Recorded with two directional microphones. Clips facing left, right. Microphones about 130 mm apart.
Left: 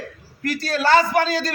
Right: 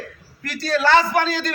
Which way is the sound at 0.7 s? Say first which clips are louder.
Right 1 dB; 40° left (ahead or behind).